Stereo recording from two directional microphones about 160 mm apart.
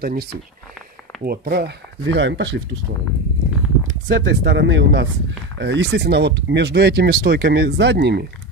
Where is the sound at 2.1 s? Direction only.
90° right.